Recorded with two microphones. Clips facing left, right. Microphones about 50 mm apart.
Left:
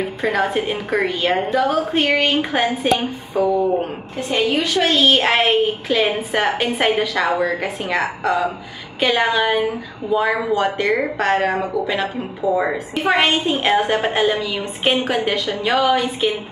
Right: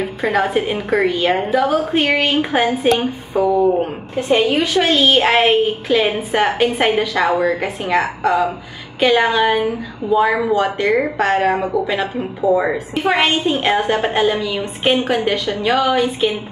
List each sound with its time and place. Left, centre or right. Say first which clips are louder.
0.2 s speech: right 3 dB; centre
4.3 s a woman's voice: right 4 dB; centre
4.9 s speech: right 2 dB; centre